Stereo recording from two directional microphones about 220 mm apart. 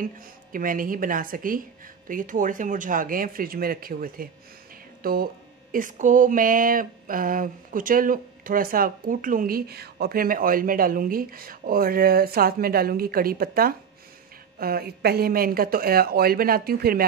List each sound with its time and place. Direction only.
0.0 s speech: 40° right (ahead or behind)